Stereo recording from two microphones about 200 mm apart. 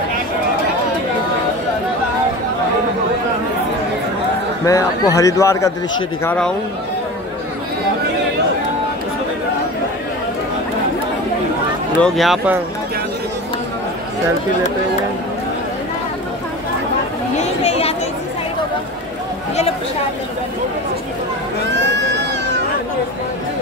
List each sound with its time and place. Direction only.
4.6 s a man's voice: 15° left (ahead or behind)
6.2 s speech: 5° left (ahead or behind)
12.0 s speech: centre (ahead or behind)
17.4 s chatter: 30° left (ahead or behind)
21.7 s a sound: 60° right (ahead or behind)